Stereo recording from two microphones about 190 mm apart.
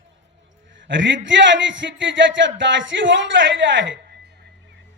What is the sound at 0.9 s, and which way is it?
A man's voice, 75° right (ahead or behind).